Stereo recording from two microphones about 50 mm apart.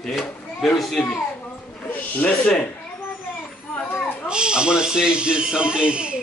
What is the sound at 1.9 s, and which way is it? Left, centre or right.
Snake, left.